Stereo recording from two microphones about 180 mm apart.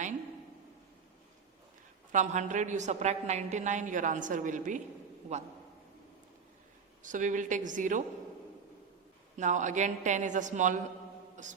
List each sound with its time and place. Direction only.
2.1 s a woman's voice: 40° right (ahead or behind)
7.0 s a woman's voice: 45° right (ahead or behind)
9.3 s a woman's voice: 45° right (ahead or behind)